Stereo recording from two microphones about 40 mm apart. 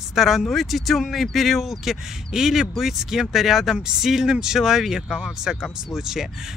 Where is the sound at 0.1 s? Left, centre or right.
Centre.